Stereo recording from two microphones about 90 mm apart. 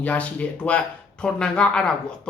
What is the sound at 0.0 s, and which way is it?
Speech, 15° left (ahead or behind).